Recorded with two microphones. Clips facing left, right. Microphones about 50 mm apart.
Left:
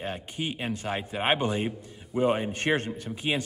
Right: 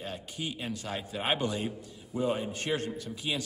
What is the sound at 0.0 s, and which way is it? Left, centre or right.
A man's voice, left.